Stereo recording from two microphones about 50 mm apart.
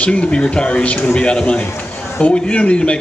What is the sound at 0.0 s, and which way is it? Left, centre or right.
A man's voice, left.